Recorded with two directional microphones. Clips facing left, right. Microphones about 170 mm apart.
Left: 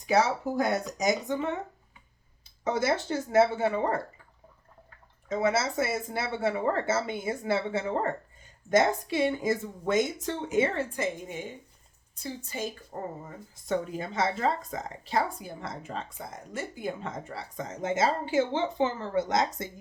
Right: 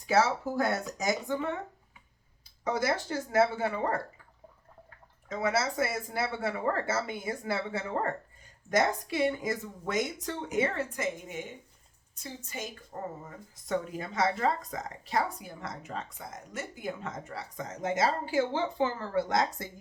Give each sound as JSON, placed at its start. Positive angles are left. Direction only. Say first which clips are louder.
{"t": 0.0, "sound": "speech", "louder": "left 1 dB", "side_deg": 15}
{"t": 2.6, "sound": "a woman's voice", "louder": "left 3 dB", "side_deg": 25}
{"t": 5.3, "sound": "a woman's voice", "louder": "left 3 dB", "side_deg": 25}